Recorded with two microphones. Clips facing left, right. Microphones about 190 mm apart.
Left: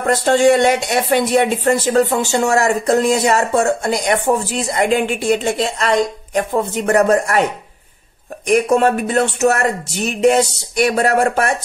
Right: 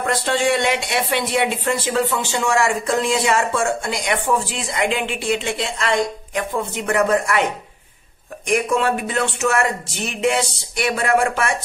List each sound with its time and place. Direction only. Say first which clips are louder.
0.0 s speech: left 7 dB; 45° left (ahead or behind)
8.5 s speech: left 6 dB; 40° left (ahead or behind)